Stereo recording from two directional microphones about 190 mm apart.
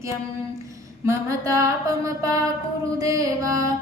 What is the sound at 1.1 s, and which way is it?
Mantra, 15° right (ahead or behind).